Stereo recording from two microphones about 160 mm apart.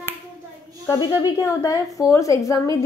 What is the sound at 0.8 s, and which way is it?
A woman's voice, 20° left (ahead or behind).